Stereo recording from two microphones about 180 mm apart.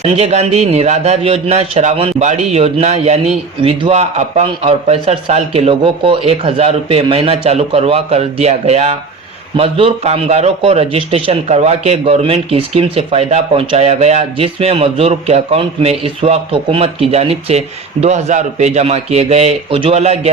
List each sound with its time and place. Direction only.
0.0 s speech: 35° right (ahead or behind)